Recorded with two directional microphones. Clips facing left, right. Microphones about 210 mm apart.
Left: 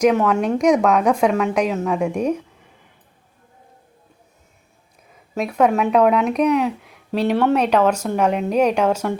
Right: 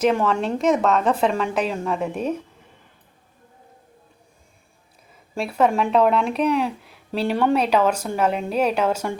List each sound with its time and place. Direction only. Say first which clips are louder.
0.0 s a woman's voice: left 3 dB; 5° left (ahead or behind)
5.5 s a woman's voice: left 2 dB; 5° left (ahead or behind)
7.5 s a woman's voice: left 2 dB; 10° right (ahead or behind)